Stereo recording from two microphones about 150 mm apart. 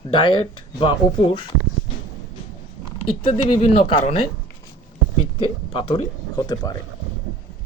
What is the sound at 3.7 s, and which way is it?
Speech, 45° left (ahead or behind).